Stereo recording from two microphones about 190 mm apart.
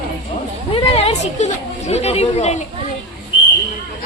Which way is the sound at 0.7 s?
30° left (ahead or behind).